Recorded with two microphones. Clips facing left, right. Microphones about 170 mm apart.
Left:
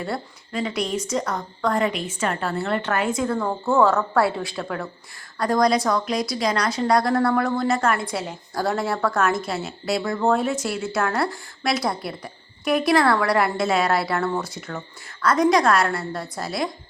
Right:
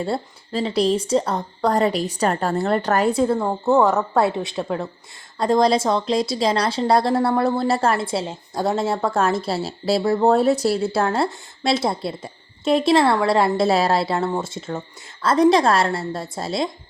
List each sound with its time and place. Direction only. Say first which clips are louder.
0.0 s a woman's voice: right 4 dB; 30° right (ahead or behind)